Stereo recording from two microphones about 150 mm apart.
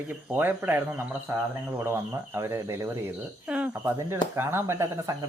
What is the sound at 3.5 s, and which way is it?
Speech, 5° right (ahead or behind).